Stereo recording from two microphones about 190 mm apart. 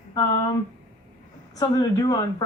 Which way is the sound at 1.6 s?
20° left (ahead or behind).